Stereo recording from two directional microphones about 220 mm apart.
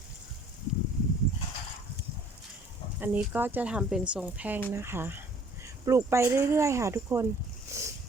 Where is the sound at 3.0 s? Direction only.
10° right (ahead or behind).